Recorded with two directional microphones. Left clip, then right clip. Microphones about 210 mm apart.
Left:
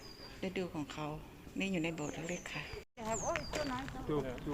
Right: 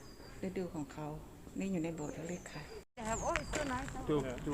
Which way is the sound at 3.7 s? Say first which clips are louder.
Right 2 dB; 50° right (ahead or behind).